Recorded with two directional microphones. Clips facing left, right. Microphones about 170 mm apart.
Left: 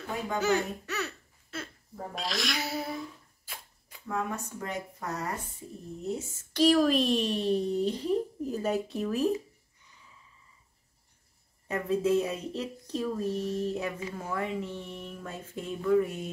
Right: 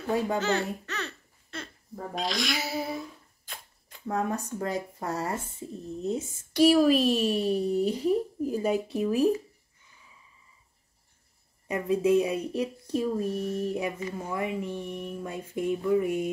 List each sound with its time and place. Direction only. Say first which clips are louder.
0.4 s babbling: even; 10° left (ahead or behind)
2.1 s speech: right 3 dB; centre (ahead or behind)
3.5 s cap gun: right 1 dB; 10° left (ahead or behind)
4.1 s speech: right 4 dB; 40° right (ahead or behind)
6.0 s speech: right 3 dB; 15° right (ahead or behind)
11.6 s speech: right 3 dB; 15° right (ahead or behind)